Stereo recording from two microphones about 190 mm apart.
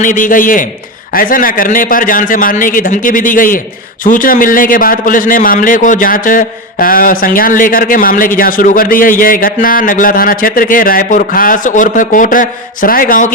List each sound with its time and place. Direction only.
0.0 s a man's voice: 45° left (ahead or behind)